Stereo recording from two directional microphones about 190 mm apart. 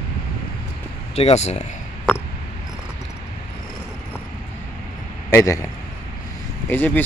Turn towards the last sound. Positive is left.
turn(degrees=10)  # may be behind; listen again after turning